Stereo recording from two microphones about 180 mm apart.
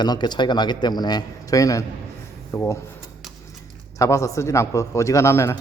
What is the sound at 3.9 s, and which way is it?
A man's voice, 15° left (ahead or behind).